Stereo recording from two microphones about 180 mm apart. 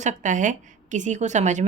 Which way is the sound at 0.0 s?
40° right (ahead or behind).